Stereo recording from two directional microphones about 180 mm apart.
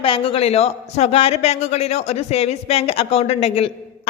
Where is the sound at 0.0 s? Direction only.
30° left (ahead or behind).